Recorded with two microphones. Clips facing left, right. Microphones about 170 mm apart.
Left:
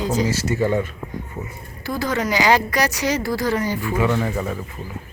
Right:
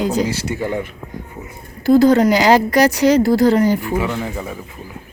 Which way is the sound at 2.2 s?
45° right (ahead or behind).